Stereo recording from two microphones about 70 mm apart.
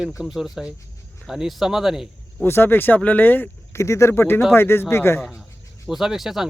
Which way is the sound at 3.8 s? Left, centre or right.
Left.